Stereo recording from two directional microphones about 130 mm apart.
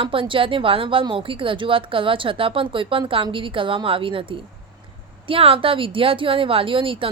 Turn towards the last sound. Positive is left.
turn(degrees=-40)  # may be behind; listen again after turning